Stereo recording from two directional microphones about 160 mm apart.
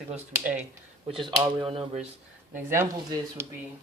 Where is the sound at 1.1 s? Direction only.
30° right (ahead or behind).